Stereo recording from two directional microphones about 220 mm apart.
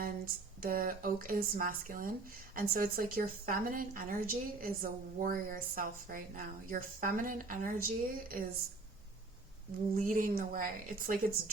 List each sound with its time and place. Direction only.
0.6 s a woman's voice: 40° right (ahead or behind)
10.0 s a woman's voice: 40° right (ahead or behind)